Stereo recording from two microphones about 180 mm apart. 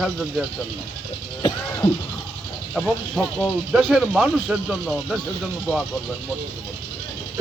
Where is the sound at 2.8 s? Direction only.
5° left (ahead or behind).